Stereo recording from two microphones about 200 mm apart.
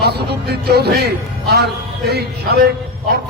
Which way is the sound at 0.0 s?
55° right (ahead or behind).